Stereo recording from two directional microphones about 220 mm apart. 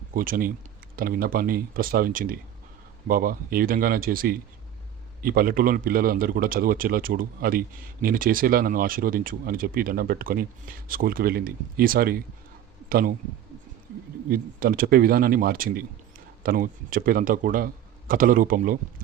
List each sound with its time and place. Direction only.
0.1 s speech: 40° right (ahead or behind)
14.3 s speech: 40° right (ahead or behind)